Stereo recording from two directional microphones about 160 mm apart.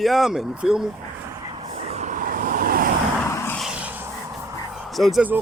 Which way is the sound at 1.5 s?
40° right (ahead or behind).